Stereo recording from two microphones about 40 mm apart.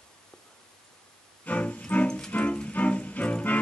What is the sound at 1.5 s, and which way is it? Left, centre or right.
Music, left.